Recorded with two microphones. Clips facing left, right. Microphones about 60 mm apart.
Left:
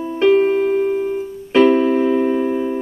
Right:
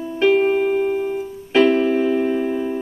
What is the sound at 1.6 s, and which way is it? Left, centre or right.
Keyboard, centre.